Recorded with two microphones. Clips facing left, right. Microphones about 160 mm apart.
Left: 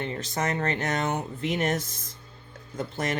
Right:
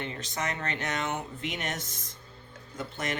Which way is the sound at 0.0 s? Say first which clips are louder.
Left 5 dB; 40° left (ahead or behind).